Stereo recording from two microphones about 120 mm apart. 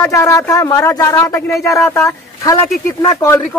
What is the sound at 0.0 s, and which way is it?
Speech, 25° left (ahead or behind).